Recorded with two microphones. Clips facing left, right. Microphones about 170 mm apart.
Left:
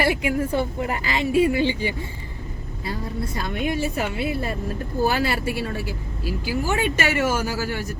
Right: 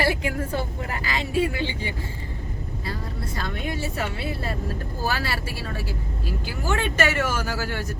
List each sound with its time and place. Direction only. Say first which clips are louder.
0.0 s a woman's voice: left 3 dB; 15° left (ahead or behind)
3.3 s a woman's voice: left 5 dB; 15° left (ahead or behind)